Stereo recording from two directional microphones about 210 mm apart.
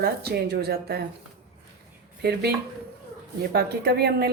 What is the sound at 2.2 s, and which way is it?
Speech, 50° right (ahead or behind).